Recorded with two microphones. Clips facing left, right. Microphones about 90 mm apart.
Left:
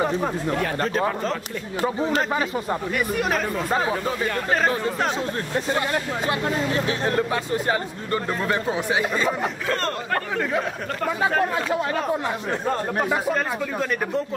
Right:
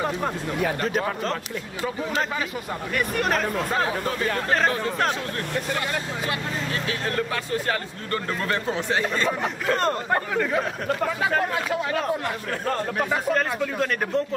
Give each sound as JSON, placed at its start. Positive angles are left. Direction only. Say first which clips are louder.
{"t": 3.0, "sound": "speech", "louder": "right 3 dB", "side_deg": 5}
{"t": 5.7, "sound": "speech", "louder": "left 4 dB", "side_deg": 25}
{"t": 9.8, "sound": "speech", "louder": "right 2 dB", "side_deg": -15}
{"t": 11.2, "sound": "speech", "louder": "left 3 dB", "side_deg": 5}
{"t": 13.0, "sound": "speech", "louder": "right 1 dB", "side_deg": 5}